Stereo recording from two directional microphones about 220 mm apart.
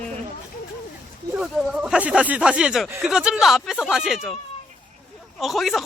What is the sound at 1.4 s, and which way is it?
Speech, centre (ahead or behind).